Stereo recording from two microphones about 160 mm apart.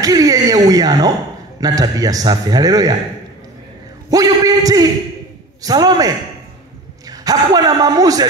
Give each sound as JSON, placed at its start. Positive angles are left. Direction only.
{"t": 0.0, "sound": "a man's voice", "side_deg": -20}
{"t": 4.1, "sound": "a man's voice", "side_deg": -25}